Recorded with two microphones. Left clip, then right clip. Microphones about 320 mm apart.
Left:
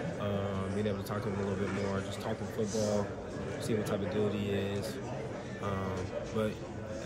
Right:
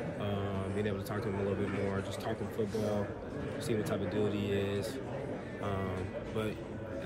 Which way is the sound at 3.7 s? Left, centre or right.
Centre.